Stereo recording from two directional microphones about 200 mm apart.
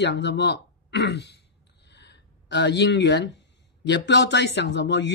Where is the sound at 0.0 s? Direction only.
60° left (ahead or behind).